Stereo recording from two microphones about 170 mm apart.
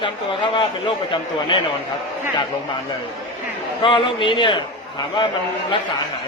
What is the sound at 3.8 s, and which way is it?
Speech, 30° left (ahead or behind).